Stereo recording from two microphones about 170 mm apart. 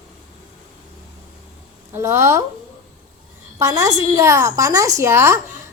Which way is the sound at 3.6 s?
20° right (ahead or behind).